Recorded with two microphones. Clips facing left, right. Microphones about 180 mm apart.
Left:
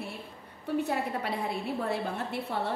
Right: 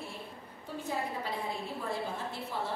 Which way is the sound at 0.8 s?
70° left (ahead or behind).